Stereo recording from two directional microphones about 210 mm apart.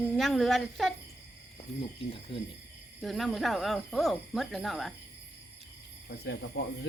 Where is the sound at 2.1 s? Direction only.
25° left (ahead or behind).